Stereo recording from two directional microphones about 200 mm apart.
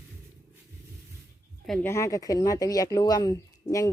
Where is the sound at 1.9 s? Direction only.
15° left (ahead or behind).